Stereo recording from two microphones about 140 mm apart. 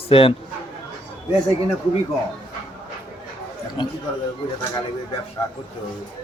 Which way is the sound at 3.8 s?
35° left (ahead or behind).